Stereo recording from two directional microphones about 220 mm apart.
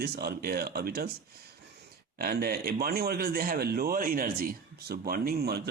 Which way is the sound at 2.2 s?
45° right (ahead or behind).